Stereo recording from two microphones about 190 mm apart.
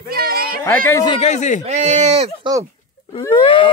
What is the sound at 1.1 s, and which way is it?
Speech, 35° left (ahead or behind).